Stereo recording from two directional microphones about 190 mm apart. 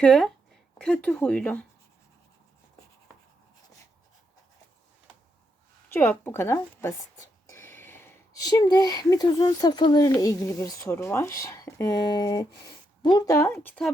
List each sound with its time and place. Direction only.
0.0 s speech: 5° left (ahead or behind)
5.9 s a woman's voice: 10° left (ahead or behind)